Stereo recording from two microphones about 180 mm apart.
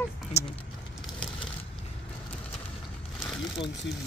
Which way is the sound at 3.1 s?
Centre (ahead or behind).